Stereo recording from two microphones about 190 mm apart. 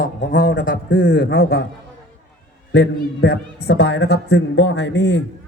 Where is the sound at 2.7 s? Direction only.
60° left (ahead or behind).